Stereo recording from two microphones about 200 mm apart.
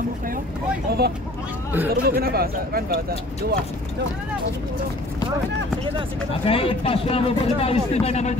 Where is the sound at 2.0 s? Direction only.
50° right (ahead or behind).